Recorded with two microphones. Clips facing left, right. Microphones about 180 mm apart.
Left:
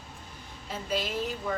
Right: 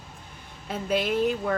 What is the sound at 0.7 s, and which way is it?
Speech, 60° right (ahead or behind).